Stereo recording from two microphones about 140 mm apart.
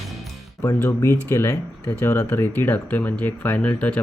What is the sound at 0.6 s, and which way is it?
Speech, 20° left (ahead or behind).